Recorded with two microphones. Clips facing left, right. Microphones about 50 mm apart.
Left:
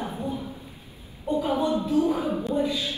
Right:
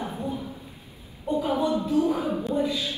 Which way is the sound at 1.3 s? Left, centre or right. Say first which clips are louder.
Even; centre.